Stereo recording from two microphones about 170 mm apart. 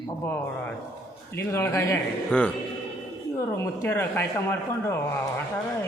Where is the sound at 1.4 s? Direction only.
15° left (ahead or behind).